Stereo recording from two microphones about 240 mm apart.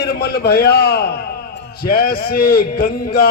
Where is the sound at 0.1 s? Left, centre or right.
Left.